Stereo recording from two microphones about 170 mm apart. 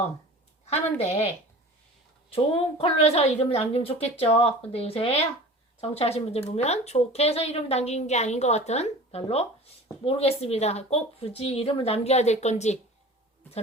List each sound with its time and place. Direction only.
0.6 s a woman's voice: 40° left (ahead or behind)
2.3 s a woman's voice: 35° left (ahead or behind)